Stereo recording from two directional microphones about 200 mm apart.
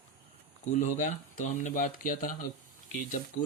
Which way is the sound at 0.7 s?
40° left (ahead or behind).